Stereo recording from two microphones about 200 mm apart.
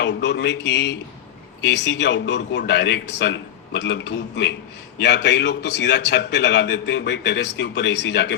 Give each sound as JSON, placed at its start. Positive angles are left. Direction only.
{"t": 0.0, "sound": "a man's voice", "side_deg": 60}